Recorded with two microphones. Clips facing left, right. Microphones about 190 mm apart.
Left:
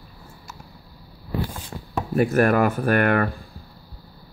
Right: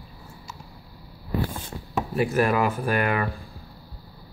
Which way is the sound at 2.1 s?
50° left (ahead or behind).